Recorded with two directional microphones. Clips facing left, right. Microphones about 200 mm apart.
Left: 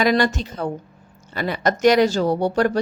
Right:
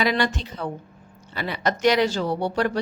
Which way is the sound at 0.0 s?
45° left (ahead or behind).